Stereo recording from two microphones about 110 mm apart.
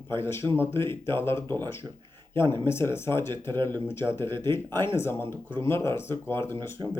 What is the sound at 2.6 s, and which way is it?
Speech, 20° left (ahead or behind).